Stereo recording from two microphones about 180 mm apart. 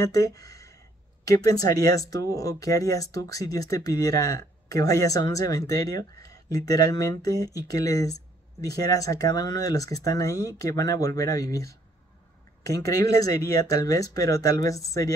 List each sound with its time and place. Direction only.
0.0 s speech: 20° left (ahead or behind)